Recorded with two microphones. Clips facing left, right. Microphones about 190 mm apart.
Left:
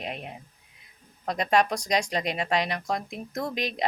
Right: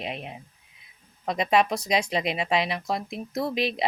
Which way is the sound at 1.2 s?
5° right (ahead or behind).